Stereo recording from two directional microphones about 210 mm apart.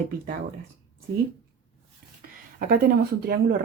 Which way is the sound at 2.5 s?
45° right (ahead or behind).